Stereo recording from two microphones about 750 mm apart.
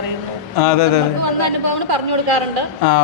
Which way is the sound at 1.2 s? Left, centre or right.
Right.